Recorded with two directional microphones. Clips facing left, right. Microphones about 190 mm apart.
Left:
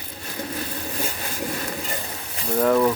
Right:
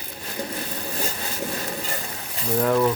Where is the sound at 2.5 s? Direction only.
Centre (ahead or behind).